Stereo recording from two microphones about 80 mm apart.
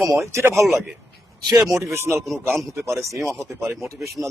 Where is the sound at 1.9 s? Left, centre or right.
Right.